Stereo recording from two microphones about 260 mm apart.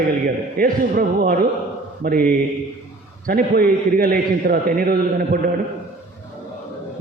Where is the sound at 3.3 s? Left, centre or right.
Right.